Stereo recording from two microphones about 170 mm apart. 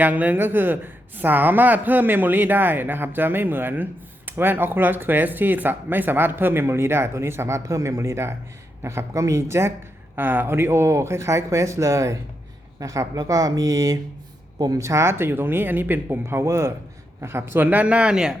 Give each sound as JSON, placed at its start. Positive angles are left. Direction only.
{"t": 0.0, "sound": "speech", "side_deg": -10}